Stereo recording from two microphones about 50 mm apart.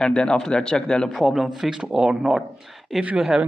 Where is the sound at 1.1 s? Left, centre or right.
Centre.